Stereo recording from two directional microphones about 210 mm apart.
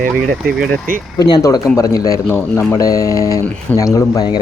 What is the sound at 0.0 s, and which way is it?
Speech, 45° right (ahead or behind).